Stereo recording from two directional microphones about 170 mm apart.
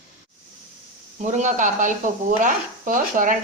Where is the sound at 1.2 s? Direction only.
45° right (ahead or behind).